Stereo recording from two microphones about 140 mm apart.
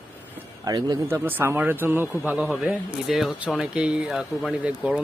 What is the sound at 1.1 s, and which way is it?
Speech, 15° right (ahead or behind).